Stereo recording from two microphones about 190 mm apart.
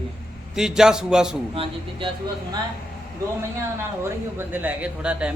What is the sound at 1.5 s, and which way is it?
Speech, 30° right (ahead or behind).